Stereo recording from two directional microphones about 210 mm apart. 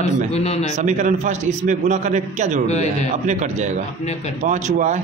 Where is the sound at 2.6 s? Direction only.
30° left (ahead or behind).